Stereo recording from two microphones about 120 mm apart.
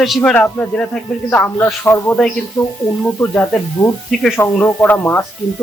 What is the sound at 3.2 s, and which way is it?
Speech, 20° left (ahead or behind).